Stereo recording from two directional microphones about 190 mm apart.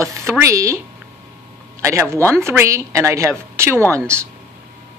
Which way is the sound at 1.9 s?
15° right (ahead or behind).